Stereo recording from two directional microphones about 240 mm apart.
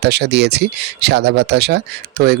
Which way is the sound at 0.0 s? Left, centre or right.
Right.